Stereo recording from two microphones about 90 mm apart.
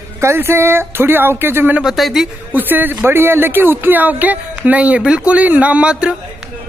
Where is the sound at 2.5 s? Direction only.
20° right (ahead or behind).